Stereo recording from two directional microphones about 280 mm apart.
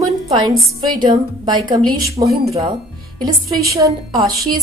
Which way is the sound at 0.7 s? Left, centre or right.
Centre.